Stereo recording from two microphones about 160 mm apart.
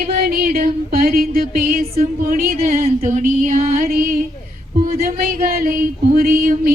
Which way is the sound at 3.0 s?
55° right (ahead or behind).